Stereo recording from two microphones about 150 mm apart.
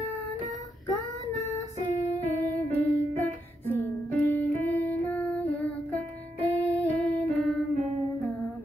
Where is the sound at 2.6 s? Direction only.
10° left (ahead or behind).